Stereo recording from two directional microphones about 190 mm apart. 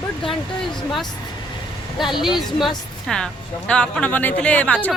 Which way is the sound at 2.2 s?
Centre (ahead or behind).